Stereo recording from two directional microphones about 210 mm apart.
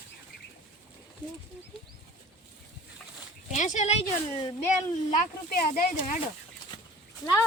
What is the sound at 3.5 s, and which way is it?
Speech, 35° left (ahead or behind).